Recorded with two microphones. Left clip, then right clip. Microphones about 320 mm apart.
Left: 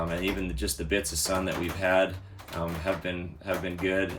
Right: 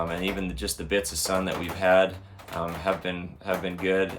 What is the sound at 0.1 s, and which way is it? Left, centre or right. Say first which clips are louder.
Speech: right 1 dB; centre.